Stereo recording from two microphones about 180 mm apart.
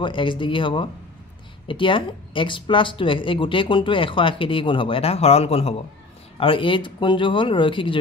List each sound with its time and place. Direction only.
0.0 s speech: 25° left (ahead or behind)